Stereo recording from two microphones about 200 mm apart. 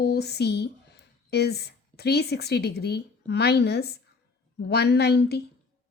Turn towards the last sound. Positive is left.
turn(degrees=55)  # may be behind; listen again after turning